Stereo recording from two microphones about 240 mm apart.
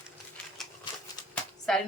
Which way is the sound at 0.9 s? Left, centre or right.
Centre.